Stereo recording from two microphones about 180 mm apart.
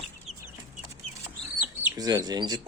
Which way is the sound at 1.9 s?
20° right (ahead or behind).